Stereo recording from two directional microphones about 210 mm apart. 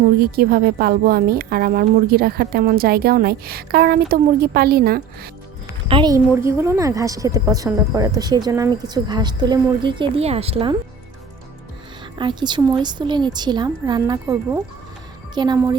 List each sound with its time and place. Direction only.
0.2 s speech: 45° right (ahead or behind)
5.9 s a woman's voice: 20° right (ahead or behind)
12.1 s a woman's voice: 20° right (ahead or behind)